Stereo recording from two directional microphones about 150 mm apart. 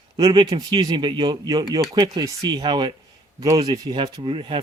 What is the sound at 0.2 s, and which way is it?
Speech, 25° right (ahead or behind).